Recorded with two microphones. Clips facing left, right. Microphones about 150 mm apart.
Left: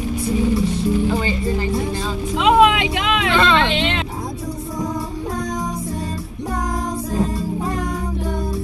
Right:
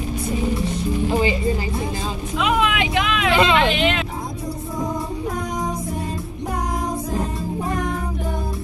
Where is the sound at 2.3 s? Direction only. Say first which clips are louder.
Left 7 dB; 25° left (ahead or behind).